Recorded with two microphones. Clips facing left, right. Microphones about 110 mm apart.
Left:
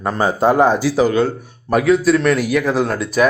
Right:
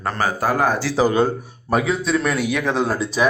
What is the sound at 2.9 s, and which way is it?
Speech, 30° right (ahead or behind).